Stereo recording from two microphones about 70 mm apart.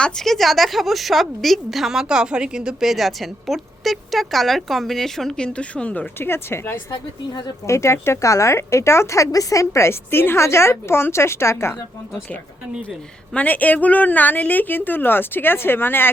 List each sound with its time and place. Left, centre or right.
0.0 s a woman's voice: centre
5.5 s a woman's voice: centre
6.1 s speech: left
13.3 s a woman's voice: left